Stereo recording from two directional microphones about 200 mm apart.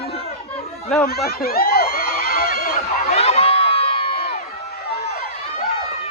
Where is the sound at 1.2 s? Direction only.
50° left (ahead or behind).